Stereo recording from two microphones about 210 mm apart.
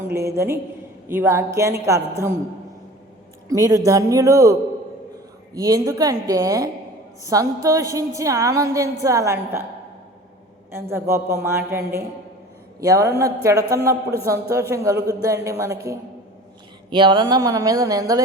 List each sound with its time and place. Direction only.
0.1 s a woman's voice: 15° right (ahead or behind)
3.5 s a woman's voice: 15° right (ahead or behind)
5.5 s a woman's voice: 15° right (ahead or behind)
10.7 s a woman's voice: 10° right (ahead or behind)